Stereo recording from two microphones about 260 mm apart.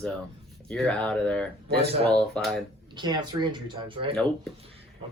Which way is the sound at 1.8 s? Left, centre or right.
Right.